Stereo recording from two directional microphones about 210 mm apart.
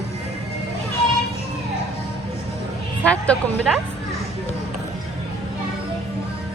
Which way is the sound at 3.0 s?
5° left (ahead or behind).